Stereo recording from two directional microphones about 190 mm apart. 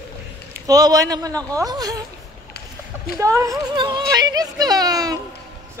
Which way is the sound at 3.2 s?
15° right (ahead or behind).